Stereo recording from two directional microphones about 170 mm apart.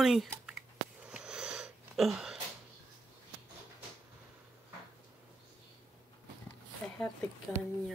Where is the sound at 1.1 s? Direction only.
5° right (ahead or behind).